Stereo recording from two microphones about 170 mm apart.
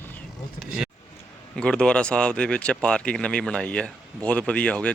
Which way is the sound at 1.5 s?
5° left (ahead or behind).